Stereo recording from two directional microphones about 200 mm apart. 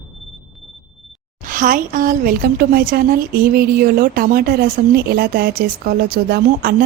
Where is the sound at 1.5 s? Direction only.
40° right (ahead or behind).